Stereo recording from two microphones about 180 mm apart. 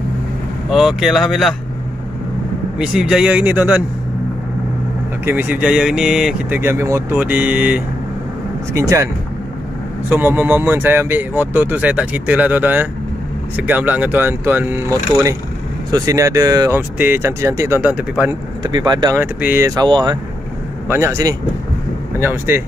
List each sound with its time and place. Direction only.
0.7 s speech: 5° right (ahead or behind)
2.8 s speech: 5° right (ahead or behind)
5.2 s speech: 10° right (ahead or behind)
18.6 s speech: 25° right (ahead or behind)